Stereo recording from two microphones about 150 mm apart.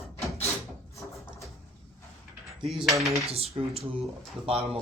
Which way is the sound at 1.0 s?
Centre (ahead or behind).